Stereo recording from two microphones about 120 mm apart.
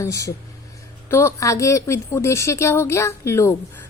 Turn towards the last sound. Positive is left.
turn(degrees=25)  # may be behind; listen again after turning